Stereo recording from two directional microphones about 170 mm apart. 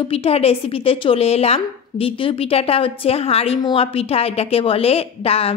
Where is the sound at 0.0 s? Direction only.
35° left (ahead or behind).